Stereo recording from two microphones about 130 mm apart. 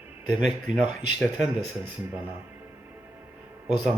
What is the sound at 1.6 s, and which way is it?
Speech, 35° left (ahead or behind).